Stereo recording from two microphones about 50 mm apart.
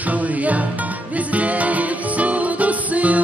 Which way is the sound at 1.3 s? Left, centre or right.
Right.